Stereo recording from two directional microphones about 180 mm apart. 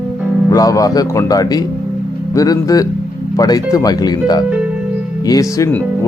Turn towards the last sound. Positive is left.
turn(degrees=20)  # may be behind; listen again after turning